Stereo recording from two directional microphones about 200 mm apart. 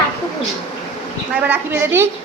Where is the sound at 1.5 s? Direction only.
10° right (ahead or behind).